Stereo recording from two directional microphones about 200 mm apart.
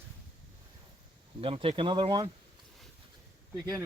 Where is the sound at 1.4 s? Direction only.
25° right (ahead or behind).